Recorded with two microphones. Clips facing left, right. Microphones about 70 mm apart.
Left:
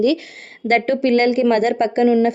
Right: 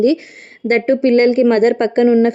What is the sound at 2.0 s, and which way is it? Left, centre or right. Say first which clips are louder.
Speech: right 3 dB; right.